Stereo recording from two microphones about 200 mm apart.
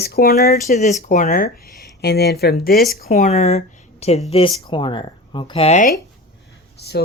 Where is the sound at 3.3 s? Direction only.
35° left (ahead or behind).